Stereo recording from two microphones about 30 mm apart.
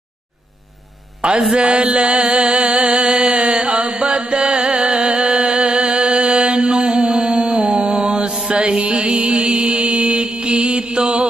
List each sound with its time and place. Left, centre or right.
1.2 s a sound: right
1.7 s mantra: right
2.6 s music: right
8.5 s music: right
9.8 s mantra: right